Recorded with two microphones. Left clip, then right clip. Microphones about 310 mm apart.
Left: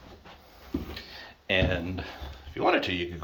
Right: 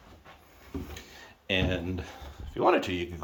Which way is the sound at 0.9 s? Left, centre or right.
Centre.